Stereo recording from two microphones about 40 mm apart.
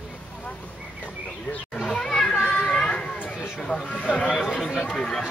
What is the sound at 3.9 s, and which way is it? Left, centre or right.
Speech, left.